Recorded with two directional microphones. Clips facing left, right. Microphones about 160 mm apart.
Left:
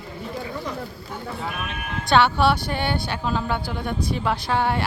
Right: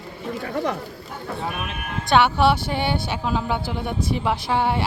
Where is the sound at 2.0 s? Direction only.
20° right (ahead or behind).